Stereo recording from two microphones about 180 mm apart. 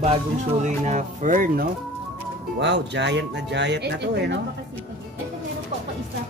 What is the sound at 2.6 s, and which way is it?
Speech, 75° right (ahead or behind).